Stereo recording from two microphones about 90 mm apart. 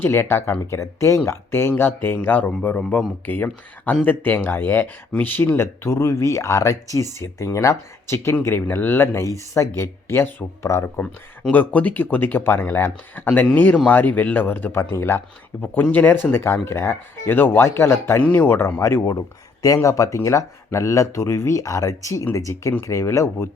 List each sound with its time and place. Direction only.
0.0 s a man's voice: 30° left (ahead or behind)
11.5 s speech: 15° left (ahead or behind)
18.2 s speech: 20° left (ahead or behind)